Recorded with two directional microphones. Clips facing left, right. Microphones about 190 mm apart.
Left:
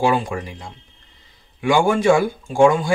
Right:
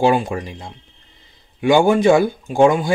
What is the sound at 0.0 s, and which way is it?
Speech, 25° right (ahead or behind).